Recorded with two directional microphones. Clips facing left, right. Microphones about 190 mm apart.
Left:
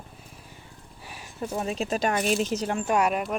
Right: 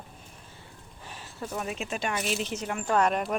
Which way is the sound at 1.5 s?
30° left (ahead or behind).